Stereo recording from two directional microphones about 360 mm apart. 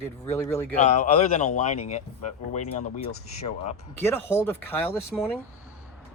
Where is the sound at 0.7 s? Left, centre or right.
Centre.